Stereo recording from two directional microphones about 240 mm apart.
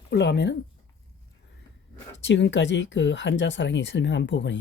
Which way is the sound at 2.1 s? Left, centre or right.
Left.